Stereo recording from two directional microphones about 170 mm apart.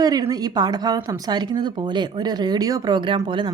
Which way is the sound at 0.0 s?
20° right (ahead or behind).